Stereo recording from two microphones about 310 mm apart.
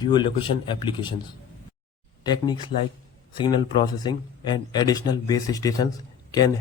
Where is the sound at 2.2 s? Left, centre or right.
Centre.